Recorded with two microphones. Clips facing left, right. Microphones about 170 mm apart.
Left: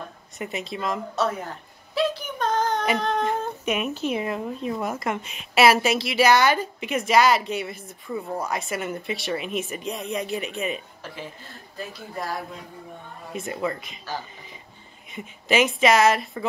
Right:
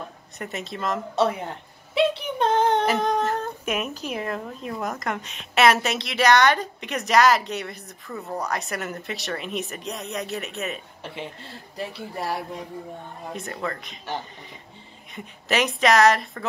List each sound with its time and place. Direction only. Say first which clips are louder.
0.4 s a woman's voice: left 1 dB; centre (ahead or behind)
1.1 s a sound: right 3 dB; 25° right (ahead or behind)
3.2 s a sound: even; centre (ahead or behind)
4.1 s a woman's voice: left 3 dB; 5° left (ahead or behind)
11.0 s speech: right 2 dB; 25° right (ahead or behind)
13.3 s a woman's voice: left 3 dB; 5° left (ahead or behind)
15.1 s a woman's voice: left 3 dB; centre (ahead or behind)